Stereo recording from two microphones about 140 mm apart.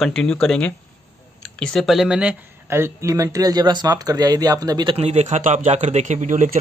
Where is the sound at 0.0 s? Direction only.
5° left (ahead or behind).